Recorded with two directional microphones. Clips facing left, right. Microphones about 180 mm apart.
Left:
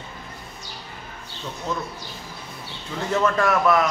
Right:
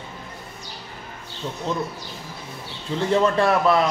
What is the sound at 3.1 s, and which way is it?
Speech, 30° right (ahead or behind).